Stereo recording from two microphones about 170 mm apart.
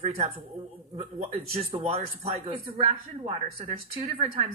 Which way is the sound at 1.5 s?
35° right (ahead or behind).